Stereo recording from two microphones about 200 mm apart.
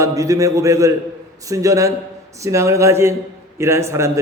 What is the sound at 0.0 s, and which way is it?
A man's voice, 15° right (ahead or behind).